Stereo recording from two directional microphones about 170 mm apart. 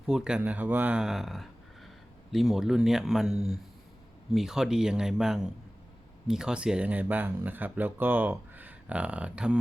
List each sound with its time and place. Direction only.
0.0 s speech: 5° right (ahead or behind)